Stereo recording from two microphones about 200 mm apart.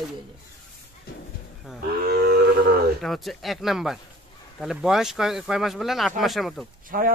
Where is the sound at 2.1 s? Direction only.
50° right (ahead or behind).